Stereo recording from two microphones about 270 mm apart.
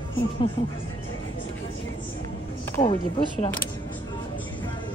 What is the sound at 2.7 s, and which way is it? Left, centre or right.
Speech, centre.